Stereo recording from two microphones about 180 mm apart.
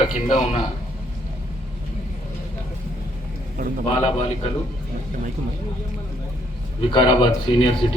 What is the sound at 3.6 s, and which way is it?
Speech, 50° right (ahead or behind).